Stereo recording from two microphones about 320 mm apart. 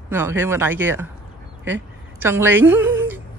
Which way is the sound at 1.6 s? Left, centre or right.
Centre.